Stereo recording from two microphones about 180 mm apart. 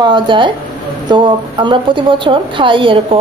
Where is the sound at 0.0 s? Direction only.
25° right (ahead or behind).